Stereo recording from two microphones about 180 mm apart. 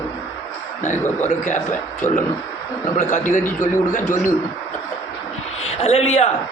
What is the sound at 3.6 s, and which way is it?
Speech, 45° left (ahead or behind).